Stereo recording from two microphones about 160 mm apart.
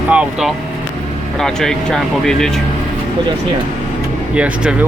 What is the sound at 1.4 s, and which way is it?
Speech, 5° left (ahead or behind).